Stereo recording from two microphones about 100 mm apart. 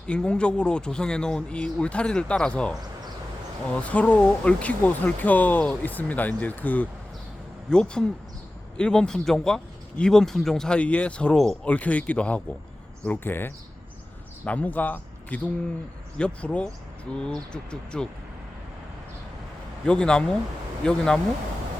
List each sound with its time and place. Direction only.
0.1 s a man's voice: 10° left (ahead or behind)
19.8 s a man's voice: 10° left (ahead or behind)